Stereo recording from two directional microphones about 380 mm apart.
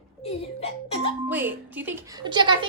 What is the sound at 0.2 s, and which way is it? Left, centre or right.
Speech, centre.